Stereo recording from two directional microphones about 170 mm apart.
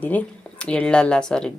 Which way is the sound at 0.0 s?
10° left (ahead or behind).